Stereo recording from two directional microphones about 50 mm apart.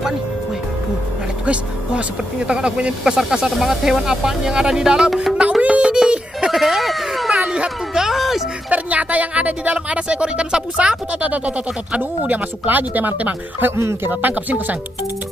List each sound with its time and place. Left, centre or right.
1.4 s speech: right
5.7 s a sound: centre
6.0 s music: right
6.5 s a sound: centre
7.4 s music: centre
8.6 s speech: right